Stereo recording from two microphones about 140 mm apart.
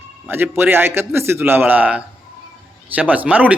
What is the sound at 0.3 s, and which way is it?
A man's voice, 15° right (ahead or behind).